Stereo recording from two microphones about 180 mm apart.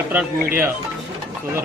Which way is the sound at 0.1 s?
10° right (ahead or behind).